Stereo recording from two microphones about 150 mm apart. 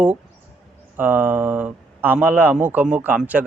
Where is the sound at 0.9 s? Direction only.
10° right (ahead or behind).